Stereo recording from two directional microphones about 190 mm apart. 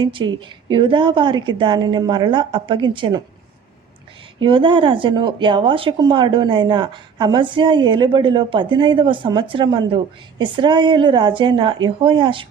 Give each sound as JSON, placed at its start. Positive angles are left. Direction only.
{"t": 0.0, "sound": "speech", "side_deg": -25}
{"t": 4.4, "sound": "speech", "side_deg": -25}